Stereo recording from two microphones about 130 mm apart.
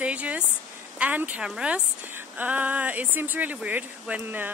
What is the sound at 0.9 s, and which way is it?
A woman's voice, 10° right (ahead or behind).